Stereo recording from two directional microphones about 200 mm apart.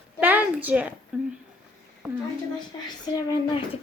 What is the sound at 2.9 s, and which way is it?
Speech, 20° left (ahead or behind).